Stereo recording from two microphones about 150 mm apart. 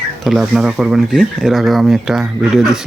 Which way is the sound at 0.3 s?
Centre (ahead or behind).